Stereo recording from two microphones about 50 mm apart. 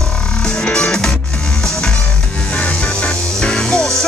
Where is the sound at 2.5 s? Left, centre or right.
Left.